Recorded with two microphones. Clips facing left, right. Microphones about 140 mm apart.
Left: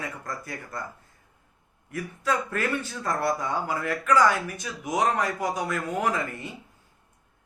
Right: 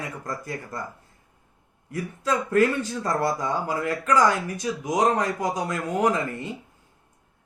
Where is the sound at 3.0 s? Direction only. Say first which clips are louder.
Right 1 dB; 20° right (ahead or behind).